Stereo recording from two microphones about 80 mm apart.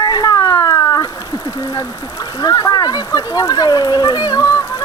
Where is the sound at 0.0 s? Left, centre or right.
Left.